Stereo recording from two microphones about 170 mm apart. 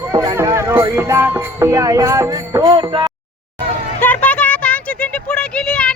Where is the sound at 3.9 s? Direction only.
10° left (ahead or behind).